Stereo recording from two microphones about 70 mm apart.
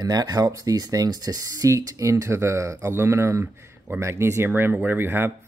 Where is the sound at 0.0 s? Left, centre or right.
Right.